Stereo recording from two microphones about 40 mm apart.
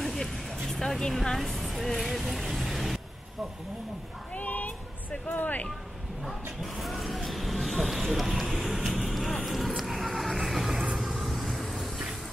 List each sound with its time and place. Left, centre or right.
0.0 s vehicle: centre
0.7 s speech: centre
1.9 s vehicle: centre
4.3 s a sound: left
5.1 s speech: left
6.6 s speech: centre
8.0 s vehicle: centre